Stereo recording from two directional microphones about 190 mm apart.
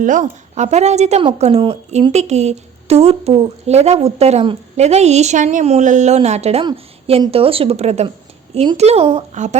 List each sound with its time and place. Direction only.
0.0 s a woman's voice: 40° right (ahead or behind)